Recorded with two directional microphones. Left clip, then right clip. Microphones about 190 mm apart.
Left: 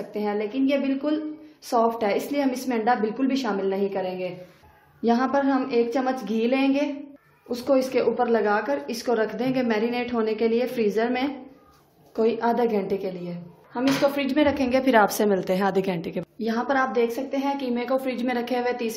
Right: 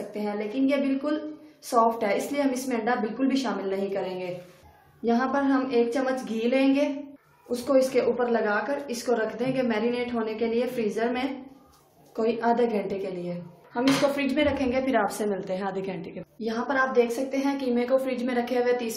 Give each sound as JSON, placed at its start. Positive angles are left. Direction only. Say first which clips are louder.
{"t": 0.1, "sound": "a woman's voice", "louder": "left 5 dB", "side_deg": 40}
{"t": 5.0, "sound": "a woman's voice", "louder": "left 3 dB", "side_deg": 50}